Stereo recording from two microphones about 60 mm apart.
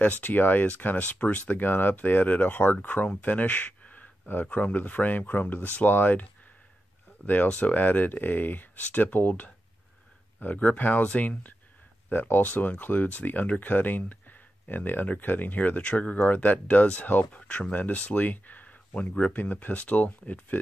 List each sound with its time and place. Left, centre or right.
0.0 s speech: left
7.2 s speech: left